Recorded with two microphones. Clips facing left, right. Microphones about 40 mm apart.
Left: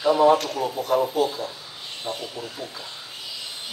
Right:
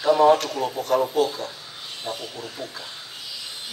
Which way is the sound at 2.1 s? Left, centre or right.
Right.